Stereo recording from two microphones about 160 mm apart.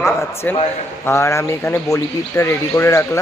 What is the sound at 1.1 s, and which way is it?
Speech, 15° left (ahead or behind).